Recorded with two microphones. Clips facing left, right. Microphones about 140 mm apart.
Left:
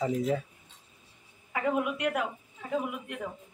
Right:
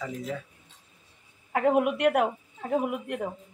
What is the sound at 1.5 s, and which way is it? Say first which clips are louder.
Speech: right 6 dB; 65° right (ahead or behind).